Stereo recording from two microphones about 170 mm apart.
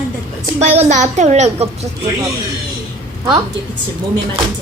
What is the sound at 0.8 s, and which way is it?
A child's voice, 45° right (ahead or behind).